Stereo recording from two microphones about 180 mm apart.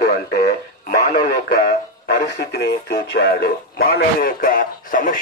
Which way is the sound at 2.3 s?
65° left (ahead or behind).